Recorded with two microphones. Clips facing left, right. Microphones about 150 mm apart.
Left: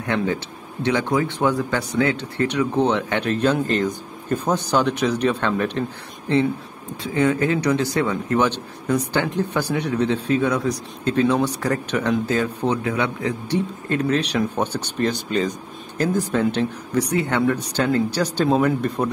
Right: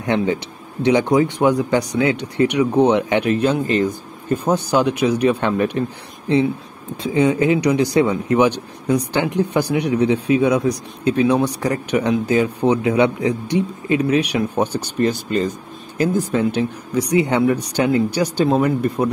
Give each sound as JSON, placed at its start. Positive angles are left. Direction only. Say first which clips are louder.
{"t": 0.0, "sound": "a man's voice", "louder": "right 4 dB", "side_deg": -20}